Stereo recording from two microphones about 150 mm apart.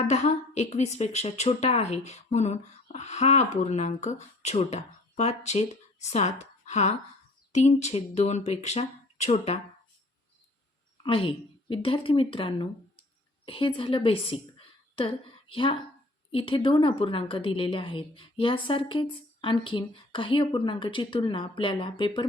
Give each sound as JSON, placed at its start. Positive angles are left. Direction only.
{"t": 0.1, "sound": "speech", "side_deg": 50}
{"t": 11.0, "sound": "a woman's voice", "side_deg": 35}